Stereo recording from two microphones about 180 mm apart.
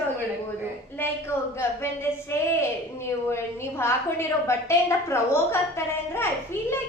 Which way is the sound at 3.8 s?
15° left (ahead or behind).